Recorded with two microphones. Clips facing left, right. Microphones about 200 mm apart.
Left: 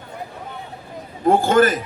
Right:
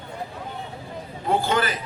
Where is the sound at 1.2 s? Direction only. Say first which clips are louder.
Left 8 dB; 45° left (ahead or behind).